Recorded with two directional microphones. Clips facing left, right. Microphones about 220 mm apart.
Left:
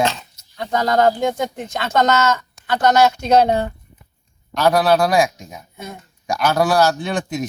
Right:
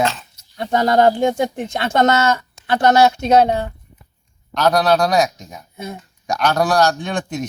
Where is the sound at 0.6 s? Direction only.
25° right (ahead or behind).